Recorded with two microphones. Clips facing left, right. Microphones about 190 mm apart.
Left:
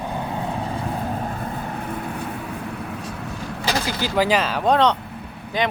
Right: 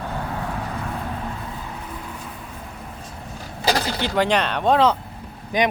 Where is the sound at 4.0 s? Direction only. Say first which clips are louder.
Left 3 dB; 5° left (ahead or behind).